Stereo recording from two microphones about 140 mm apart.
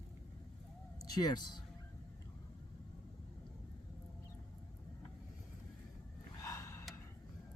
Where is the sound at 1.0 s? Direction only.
30° left (ahead or behind).